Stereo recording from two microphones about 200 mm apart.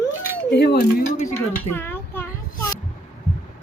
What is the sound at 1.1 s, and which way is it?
Speech, 35° left (ahead or behind).